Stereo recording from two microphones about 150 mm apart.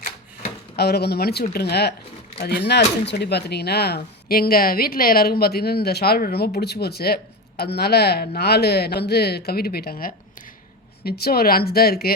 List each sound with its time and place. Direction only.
0.8 s a woman's voice: 90° left
11.2 s a woman's voice: 90° left